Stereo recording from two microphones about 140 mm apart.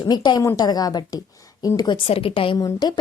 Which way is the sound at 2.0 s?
40° left (ahead or behind).